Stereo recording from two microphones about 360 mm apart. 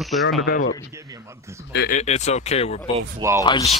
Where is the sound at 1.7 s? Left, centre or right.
Left.